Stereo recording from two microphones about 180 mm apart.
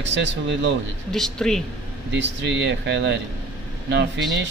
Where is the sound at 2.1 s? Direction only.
85° right.